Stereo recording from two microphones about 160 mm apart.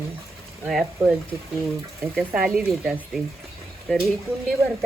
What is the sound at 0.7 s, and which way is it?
Speech, centre (ahead or behind).